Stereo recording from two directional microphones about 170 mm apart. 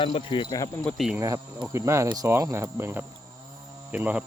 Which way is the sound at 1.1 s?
20° right (ahead or behind).